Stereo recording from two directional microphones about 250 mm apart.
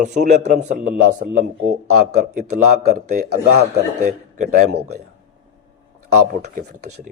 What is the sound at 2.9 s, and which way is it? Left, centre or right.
A man's voice, right.